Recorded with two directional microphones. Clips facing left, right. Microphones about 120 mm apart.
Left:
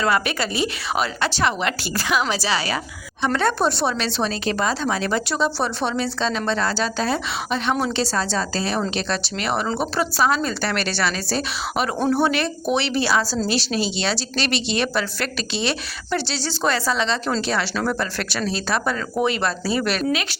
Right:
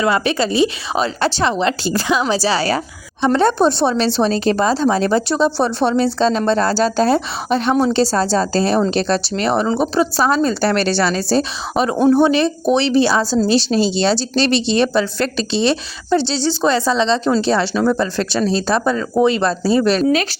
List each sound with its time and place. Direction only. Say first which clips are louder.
0.0 s speech: right 5 dB; 25° right (ahead or behind)
10.2 s speech: right 6 dB; 30° right (ahead or behind)
11.9 s speech: right 8 dB; 15° right (ahead or behind)